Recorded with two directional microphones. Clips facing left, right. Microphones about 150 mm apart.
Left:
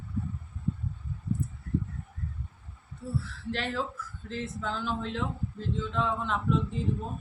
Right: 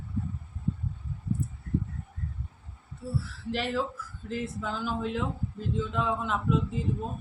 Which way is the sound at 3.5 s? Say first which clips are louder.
Right 3 dB; 5° right (ahead or behind).